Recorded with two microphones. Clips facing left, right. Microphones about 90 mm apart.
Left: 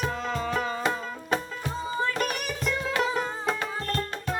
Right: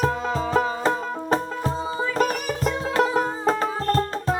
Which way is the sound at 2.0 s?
5° right (ahead or behind).